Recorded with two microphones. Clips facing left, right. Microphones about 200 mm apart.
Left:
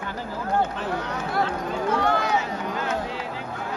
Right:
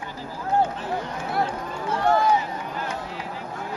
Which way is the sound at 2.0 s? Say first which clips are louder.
Right 6 dB; 75° left (ahead or behind).